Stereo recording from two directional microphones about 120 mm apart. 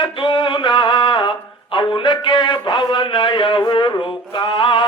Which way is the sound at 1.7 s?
40° left (ahead or behind).